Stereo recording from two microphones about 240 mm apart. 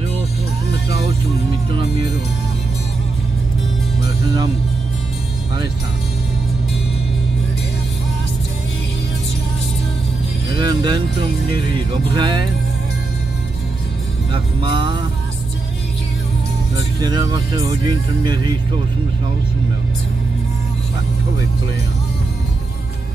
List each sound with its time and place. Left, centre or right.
10.6 s music: centre
12.2 s music: centre
14.3 s music: right
17.0 s speech: centre